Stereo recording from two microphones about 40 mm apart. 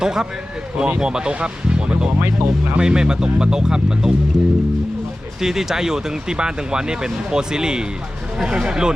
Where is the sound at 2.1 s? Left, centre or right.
Right.